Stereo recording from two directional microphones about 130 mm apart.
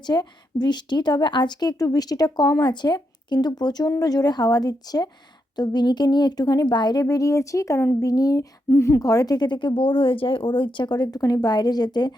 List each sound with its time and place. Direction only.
0.1 s speech: 35° left (ahead or behind)